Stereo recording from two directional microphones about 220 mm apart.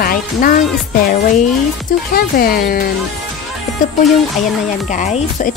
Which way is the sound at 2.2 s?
40° left (ahead or behind).